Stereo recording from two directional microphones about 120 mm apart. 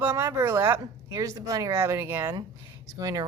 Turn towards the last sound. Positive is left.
turn(degrees=-30)  # may be behind; listen again after turning